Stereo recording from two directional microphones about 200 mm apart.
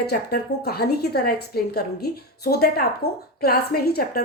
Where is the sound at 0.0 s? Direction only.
50° left (ahead or behind).